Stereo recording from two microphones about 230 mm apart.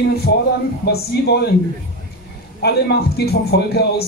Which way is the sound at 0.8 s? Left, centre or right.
Left.